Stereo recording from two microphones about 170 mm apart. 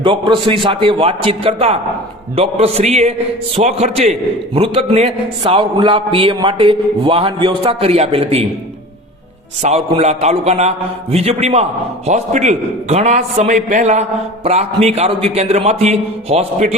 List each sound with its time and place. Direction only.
0.0 s a man's voice: 30° right (ahead or behind)
9.6 s a man's voice: 40° right (ahead or behind)